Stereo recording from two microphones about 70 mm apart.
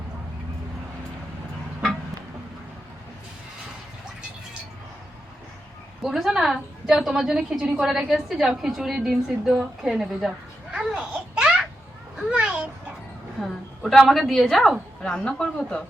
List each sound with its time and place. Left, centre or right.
6.0 s a woman's voice: centre
10.7 s babbling: centre
12.3 s a child's voice: centre
13.4 s a woman's voice: centre
15.0 s speech: centre